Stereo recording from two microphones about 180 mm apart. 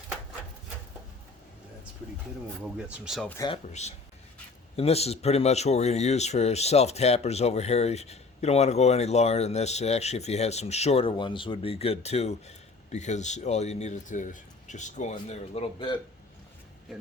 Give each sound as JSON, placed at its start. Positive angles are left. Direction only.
{"t": 2.7, "sound": "speech", "side_deg": -5}
{"t": 3.2, "sound": "speech", "side_deg": 15}
{"t": 3.5, "sound": "speech", "side_deg": 40}